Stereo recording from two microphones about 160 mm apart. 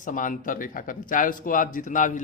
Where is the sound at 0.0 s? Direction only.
55° left (ahead or behind).